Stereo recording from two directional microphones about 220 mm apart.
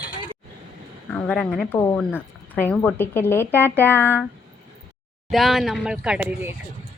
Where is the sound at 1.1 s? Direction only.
5° left (ahead or behind).